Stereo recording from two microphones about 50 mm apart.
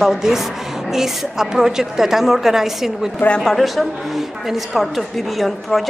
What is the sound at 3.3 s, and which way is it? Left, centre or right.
A woman's voice, centre.